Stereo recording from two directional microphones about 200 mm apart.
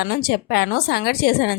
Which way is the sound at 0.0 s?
50° left (ahead or behind).